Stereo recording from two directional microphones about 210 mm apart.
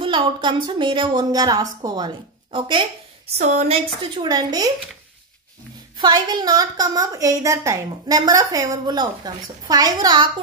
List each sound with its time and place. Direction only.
0.0 s a woman's voice: 25° right (ahead or behind)
5.9 s a woman's voice: 20° right (ahead or behind)